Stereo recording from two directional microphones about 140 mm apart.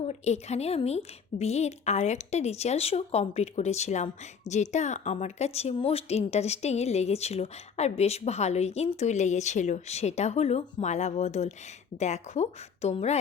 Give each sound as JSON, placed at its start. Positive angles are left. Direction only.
{"t": 0.1, "sound": "a woman's voice", "side_deg": 50}